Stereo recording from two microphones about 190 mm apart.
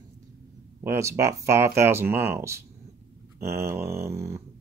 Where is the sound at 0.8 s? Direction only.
15° right (ahead or behind).